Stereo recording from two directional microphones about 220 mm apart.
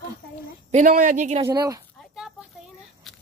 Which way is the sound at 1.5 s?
15° right (ahead or behind).